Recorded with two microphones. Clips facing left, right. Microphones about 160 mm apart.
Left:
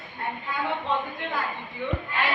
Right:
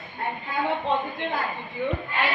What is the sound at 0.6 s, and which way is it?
Speech, 20° right (ahead or behind).